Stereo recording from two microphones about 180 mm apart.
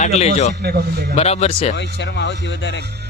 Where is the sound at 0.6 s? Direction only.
60° right (ahead or behind).